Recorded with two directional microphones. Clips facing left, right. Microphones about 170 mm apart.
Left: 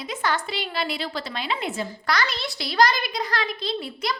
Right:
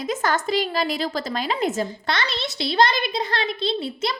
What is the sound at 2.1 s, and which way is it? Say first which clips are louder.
A child's voice: even; 25° right (ahead or behind).